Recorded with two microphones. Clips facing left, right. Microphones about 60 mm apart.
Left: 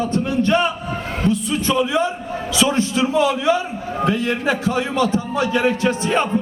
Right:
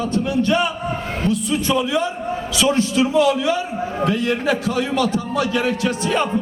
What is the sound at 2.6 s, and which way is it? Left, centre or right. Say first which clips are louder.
A man's voice: even; left.